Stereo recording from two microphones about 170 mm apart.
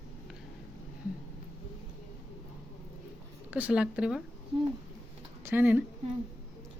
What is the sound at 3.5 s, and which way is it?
Speech, 5° right (ahead or behind).